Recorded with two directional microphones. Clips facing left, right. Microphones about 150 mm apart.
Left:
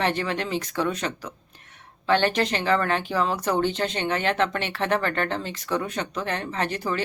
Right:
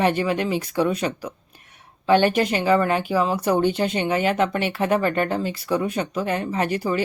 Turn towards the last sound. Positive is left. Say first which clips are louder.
# right 4 dB
turn(degrees=-10)  # may be behind; listen again after turning